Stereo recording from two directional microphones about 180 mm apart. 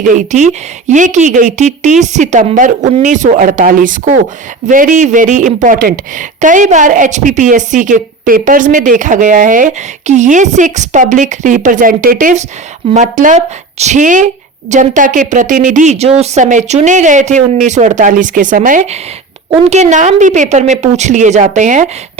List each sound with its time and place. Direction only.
0.2 s a woman's voice: 40° right (ahead or behind)